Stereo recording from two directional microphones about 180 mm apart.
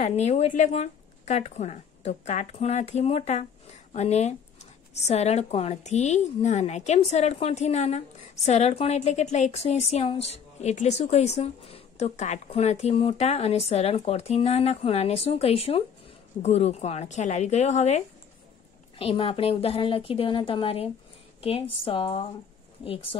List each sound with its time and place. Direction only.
0.0 s speech: 40° left (ahead or behind)